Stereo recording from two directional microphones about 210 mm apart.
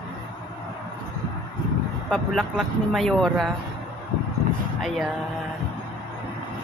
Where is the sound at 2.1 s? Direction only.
Centre (ahead or behind).